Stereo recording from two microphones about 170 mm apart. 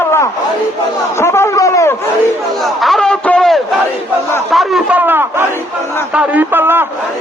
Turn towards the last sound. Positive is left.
turn(degrees=-10)  # may be behind; listen again after turning